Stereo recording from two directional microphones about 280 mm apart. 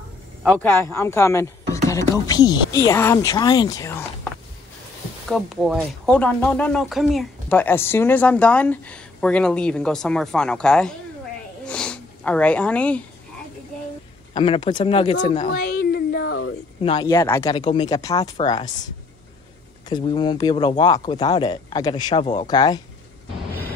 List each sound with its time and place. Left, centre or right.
0.4 s speech: centre
5.3 s speech: centre
11.6 s snort: centre
14.3 s speech: centre
15.2 s a sound: left
16.8 s speech: centre
19.9 s speech: centre
22.2 s speech: left
22.5 s speech: centre